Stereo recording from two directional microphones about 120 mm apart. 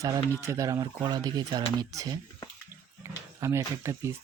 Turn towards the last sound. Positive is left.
turn(degrees=-25)  # may be behind; listen again after turning